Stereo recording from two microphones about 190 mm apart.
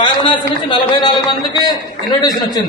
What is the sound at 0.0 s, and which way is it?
A man's voice, 25° left (ahead or behind).